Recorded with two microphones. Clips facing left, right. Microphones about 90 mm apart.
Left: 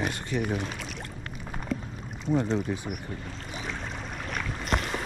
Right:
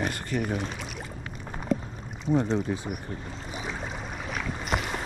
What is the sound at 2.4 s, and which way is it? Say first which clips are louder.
Speech: right 1 dB; centre (ahead or behind).